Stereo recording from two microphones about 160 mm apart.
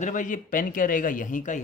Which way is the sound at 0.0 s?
50° left (ahead or behind).